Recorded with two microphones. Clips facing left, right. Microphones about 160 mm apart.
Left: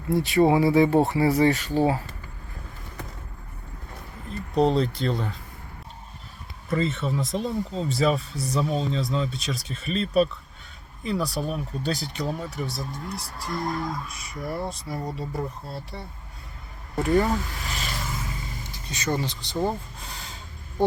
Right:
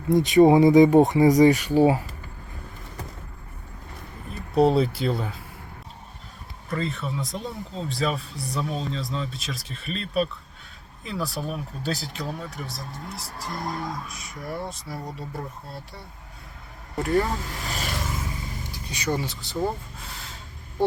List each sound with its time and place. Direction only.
0.1 s speech: 20° right (ahead or behind)
4.3 s speech: 5° right (ahead or behind)
6.7 s speech: centre (ahead or behind)
18.9 s speech: 10° right (ahead or behind)
19.6 s a sound: 5° right (ahead or behind)